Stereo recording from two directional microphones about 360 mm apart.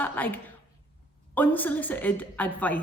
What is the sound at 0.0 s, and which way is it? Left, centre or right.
Speech, centre.